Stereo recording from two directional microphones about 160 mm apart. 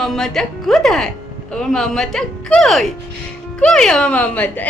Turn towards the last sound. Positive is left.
turn(degrees=10)  # may be behind; listen again after turning